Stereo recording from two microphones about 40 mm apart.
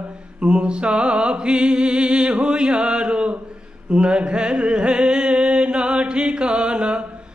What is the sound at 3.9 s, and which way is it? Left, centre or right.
Music, right.